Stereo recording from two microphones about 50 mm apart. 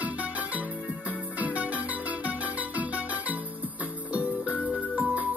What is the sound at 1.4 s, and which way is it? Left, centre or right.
Music, right.